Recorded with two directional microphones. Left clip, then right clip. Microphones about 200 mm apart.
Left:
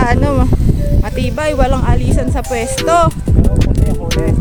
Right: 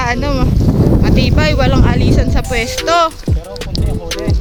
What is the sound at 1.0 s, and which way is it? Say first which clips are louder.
Speech: right 4 dB; 5° left (ahead or behind).